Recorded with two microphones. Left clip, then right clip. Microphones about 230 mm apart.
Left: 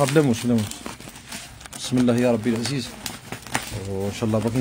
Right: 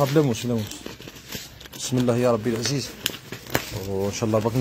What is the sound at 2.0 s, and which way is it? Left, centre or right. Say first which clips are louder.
Speech: even; centre.